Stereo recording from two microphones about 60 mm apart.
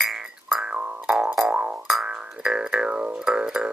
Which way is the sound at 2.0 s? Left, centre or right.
Centre.